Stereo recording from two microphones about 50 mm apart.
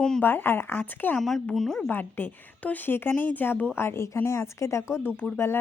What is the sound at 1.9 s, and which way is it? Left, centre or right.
Speech, left.